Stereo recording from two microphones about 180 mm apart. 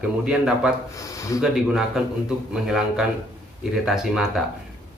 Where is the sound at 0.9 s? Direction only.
20° left (ahead or behind).